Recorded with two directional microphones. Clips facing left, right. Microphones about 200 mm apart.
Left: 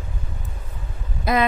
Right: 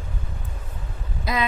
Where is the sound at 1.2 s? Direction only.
55° left (ahead or behind).